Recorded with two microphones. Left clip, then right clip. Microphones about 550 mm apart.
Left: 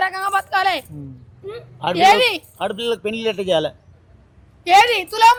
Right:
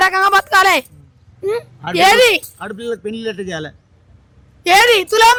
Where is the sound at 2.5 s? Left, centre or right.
Centre.